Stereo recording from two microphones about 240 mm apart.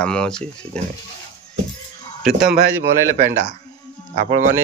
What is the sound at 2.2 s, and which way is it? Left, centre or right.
Speech, right.